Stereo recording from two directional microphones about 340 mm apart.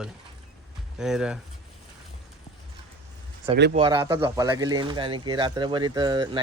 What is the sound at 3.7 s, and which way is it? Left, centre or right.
Speech, centre.